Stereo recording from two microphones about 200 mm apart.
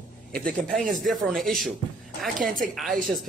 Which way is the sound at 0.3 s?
5° left (ahead or behind).